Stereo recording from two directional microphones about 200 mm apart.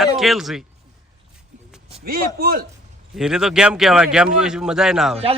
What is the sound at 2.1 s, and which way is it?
Speech, 45° right (ahead or behind).